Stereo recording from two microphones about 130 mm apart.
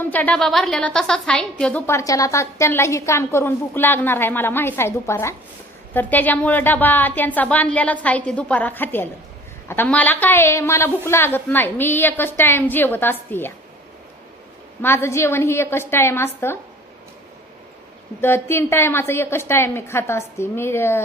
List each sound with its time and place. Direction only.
0.0 s a woman's voice: 10° left (ahead or behind)
1.9 s a woman's voice: 25° left (ahead or behind)
14.8 s a woman's voice: 20° left (ahead or behind)
18.2 s a woman's voice: 20° left (ahead or behind)